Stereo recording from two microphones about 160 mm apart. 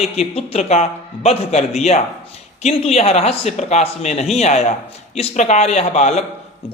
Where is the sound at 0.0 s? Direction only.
40° left (ahead or behind).